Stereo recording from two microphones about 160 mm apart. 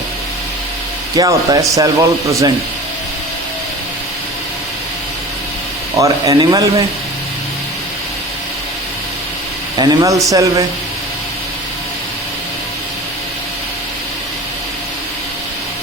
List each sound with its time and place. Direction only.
1.1 s speech: 25° right (ahead or behind)
6.0 s speech: 20° right (ahead or behind)
9.7 s speech: 25° right (ahead or behind)